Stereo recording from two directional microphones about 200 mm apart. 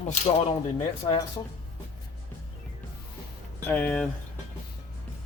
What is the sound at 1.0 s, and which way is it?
Speech, 25° left (ahead or behind).